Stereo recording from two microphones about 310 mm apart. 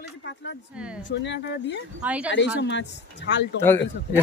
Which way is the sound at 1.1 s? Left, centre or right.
Left.